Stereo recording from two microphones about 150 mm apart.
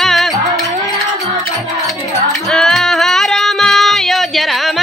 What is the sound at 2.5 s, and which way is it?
Music, centre (ahead or behind).